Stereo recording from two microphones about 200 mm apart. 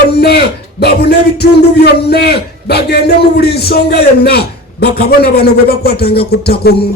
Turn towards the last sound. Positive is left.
turn(degrees=50)  # may be behind; listen again after turning